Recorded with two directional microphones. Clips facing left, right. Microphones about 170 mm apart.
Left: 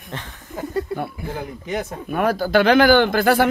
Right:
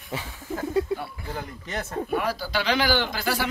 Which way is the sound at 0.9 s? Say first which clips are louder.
Left 3 dB; 55° left (ahead or behind).